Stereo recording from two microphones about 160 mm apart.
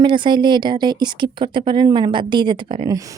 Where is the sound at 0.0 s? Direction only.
30° right (ahead or behind).